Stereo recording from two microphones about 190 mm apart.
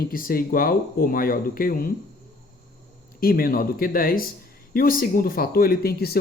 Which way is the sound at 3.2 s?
50° left (ahead or behind).